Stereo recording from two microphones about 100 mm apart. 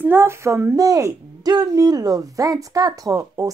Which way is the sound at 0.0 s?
25° right (ahead or behind).